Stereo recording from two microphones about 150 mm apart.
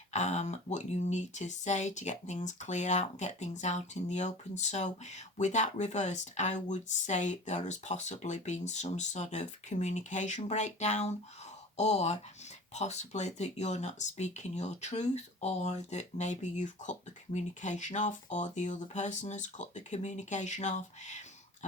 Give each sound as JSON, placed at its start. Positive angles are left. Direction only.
{"t": 0.1, "sound": "speech", "side_deg": 50}